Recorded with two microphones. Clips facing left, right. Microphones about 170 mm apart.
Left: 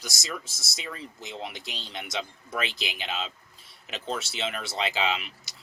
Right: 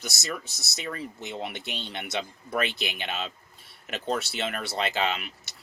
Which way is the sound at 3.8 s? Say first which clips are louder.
Right 4 dB; 50° right (ahead or behind).